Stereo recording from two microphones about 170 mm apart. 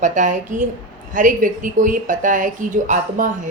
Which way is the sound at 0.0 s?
45° right (ahead or behind).